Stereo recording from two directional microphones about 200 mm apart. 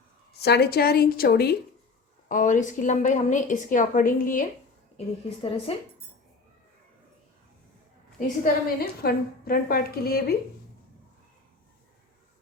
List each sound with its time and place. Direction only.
0.3 s a woman's voice: 55° left (ahead or behind)
2.3 s a woman's voice: 40° left (ahead or behind)
4.9 s a woman's voice: 30° left (ahead or behind)
8.6 s a woman's voice: 50° left (ahead or behind)